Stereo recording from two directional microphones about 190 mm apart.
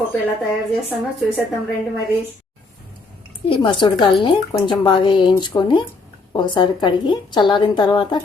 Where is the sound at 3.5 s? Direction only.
25° left (ahead or behind).